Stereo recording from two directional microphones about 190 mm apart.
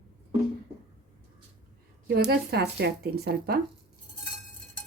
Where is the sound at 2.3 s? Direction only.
60° right (ahead or behind).